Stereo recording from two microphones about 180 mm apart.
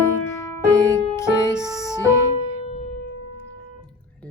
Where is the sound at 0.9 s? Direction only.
15° left (ahead or behind).